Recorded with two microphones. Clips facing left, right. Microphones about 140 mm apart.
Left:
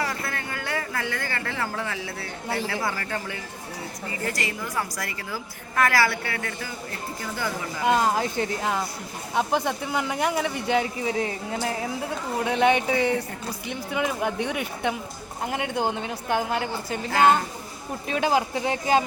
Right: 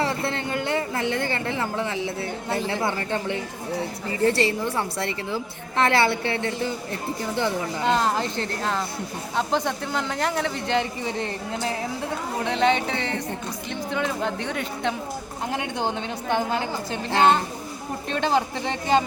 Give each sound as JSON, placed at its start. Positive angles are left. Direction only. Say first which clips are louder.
{"t": 0.0, "sound": "a woman's voice", "louder": "right 5 dB", "side_deg": -25}
{"t": 7.9, "sound": "a woman's voice", "louder": "left 1 dB", "side_deg": 10}
{"t": 17.1, "sound": "a woman's voice", "louder": "even", "side_deg": -25}
{"t": 18.1, "sound": "speech", "louder": "even", "side_deg": 10}